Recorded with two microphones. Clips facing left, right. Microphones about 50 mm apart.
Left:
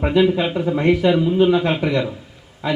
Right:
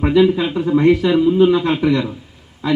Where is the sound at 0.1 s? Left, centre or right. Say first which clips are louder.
Right 3 dB; centre.